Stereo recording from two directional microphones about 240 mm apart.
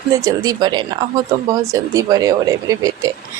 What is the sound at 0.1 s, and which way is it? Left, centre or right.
A woman's voice, centre.